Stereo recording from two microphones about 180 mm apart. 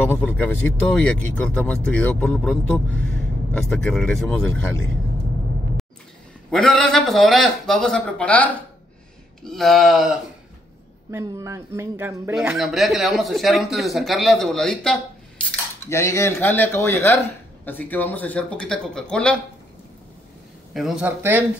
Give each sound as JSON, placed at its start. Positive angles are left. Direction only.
{"t": 0.0, "sound": "speech", "side_deg": 10}
{"t": 6.5, "sound": "speech", "side_deg": 0}
{"t": 11.1, "sound": "a sound", "side_deg": -20}
{"t": 12.4, "sound": "speech", "side_deg": 0}
{"t": 15.9, "sound": "speech", "side_deg": 15}
{"t": 20.7, "sound": "a sound", "side_deg": 0}